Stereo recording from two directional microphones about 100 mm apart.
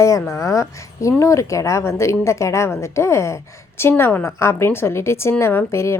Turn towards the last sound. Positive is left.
turn(degrees=25)  # may be behind; listen again after turning